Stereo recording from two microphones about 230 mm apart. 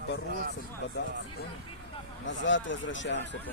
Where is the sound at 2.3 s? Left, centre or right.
Left.